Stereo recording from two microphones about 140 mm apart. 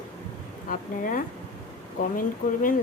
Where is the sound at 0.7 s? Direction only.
75° left (ahead or behind).